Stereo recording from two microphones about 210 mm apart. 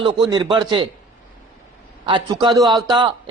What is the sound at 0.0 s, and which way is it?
Speech, 25° right (ahead or behind).